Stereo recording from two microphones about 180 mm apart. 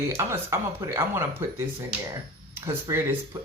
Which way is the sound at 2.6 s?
15° right (ahead or behind).